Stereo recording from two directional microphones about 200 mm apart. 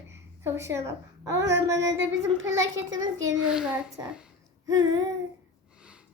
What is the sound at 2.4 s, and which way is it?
Speech, 70° right (ahead or behind).